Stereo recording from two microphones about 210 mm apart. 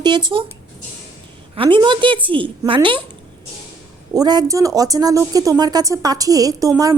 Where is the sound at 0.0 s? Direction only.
20° right (ahead or behind).